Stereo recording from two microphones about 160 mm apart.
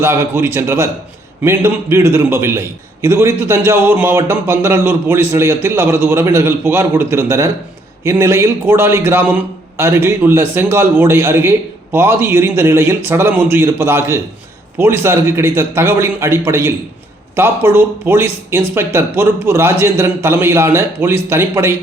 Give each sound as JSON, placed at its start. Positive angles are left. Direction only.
{"t": 0.0, "sound": "a man's voice", "side_deg": -15}